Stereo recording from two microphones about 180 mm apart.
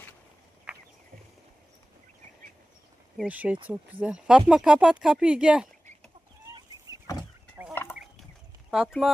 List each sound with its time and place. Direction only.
0.7 s a sound: 5° right (ahead or behind)
3.2 s speech: 10° right (ahead or behind)
6.9 s power windows: 20° right (ahead or behind)
7.5 s fowl: 10° right (ahead or behind)
8.7 s speech: centre (ahead or behind)